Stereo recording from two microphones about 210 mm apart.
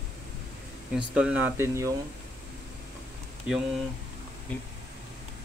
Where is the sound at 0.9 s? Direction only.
5° right (ahead or behind).